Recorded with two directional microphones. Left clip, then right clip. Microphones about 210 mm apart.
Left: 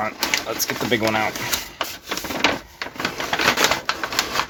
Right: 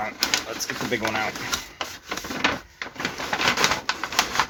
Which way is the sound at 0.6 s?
50° left (ahead or behind).